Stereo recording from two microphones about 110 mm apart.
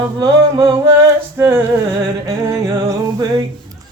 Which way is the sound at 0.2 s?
35° right (ahead or behind).